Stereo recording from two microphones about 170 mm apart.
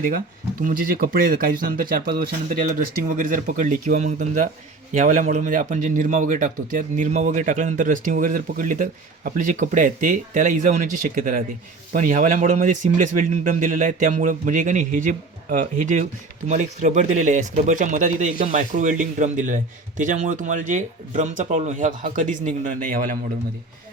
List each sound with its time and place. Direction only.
0.6 s speech: 55° right (ahead or behind)